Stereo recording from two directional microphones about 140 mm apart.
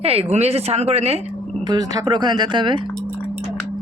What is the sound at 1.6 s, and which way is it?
Speech, 30° right (ahead or behind).